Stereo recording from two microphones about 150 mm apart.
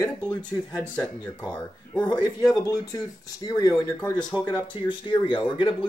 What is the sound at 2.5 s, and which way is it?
Speech, 25° left (ahead or behind).